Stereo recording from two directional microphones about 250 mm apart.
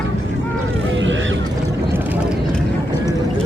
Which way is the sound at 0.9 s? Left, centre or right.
Right.